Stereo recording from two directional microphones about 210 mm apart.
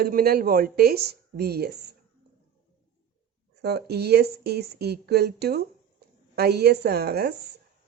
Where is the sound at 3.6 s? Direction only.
50° right (ahead or behind).